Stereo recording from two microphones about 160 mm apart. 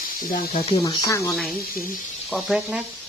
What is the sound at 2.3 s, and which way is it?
Speech, centre (ahead or behind).